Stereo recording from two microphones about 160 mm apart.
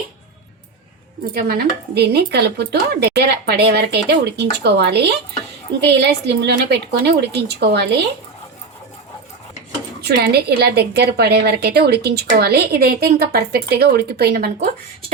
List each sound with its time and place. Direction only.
1.3 s speech: 70° right (ahead or behind)
2.0 s speech: 90° right
10.0 s a woman's voice: 85° right; by 14.7 s 70° right (ahead or behind)